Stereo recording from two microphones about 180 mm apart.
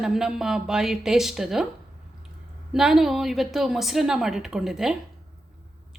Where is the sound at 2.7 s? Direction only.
Centre (ahead or behind).